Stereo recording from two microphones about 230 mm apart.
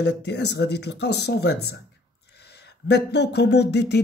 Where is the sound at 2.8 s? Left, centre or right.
Left.